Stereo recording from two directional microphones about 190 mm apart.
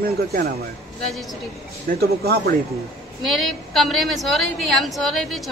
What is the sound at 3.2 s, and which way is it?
A woman's voice, centre (ahead or behind).